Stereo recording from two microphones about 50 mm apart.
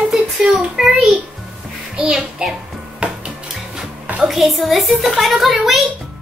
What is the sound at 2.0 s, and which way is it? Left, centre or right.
Speech, centre.